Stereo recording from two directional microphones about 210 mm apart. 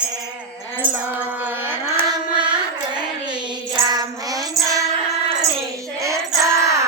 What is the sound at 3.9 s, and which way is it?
Music, 20° right (ahead or behind).